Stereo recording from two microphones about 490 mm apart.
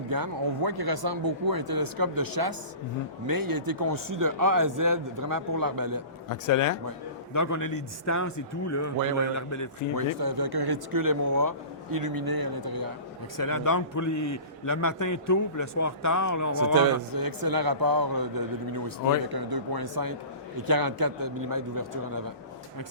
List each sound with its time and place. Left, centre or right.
0.1 s a man's voice: right
6.2 s a man's voice: left
10.2 s speech: right
13.3 s a man's voice: left
16.7 s speech: right